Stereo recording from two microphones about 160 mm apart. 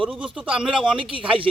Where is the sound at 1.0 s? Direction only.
35° right (ahead or behind).